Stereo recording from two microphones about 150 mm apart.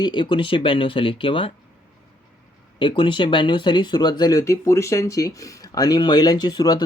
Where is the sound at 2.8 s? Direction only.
35° left (ahead or behind).